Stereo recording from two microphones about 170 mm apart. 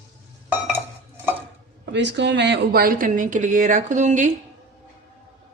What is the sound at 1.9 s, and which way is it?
Speech, 90° right.